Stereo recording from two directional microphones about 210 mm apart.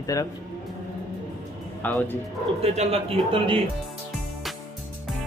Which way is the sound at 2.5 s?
30° right (ahead or behind).